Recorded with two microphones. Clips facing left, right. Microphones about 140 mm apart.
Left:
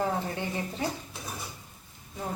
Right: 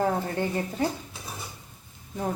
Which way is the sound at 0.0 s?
50° right (ahead or behind).